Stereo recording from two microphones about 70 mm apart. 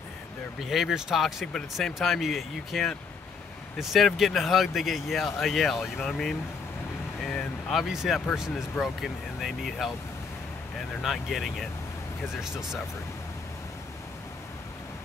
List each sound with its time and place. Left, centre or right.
0.7 s speech: centre
7.7 s speech: centre
11.0 s speech: centre